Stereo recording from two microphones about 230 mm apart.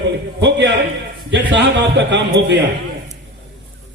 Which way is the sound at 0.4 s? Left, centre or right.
Right.